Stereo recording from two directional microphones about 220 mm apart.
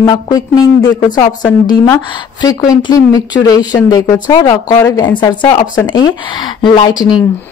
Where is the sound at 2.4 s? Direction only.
15° left (ahead or behind).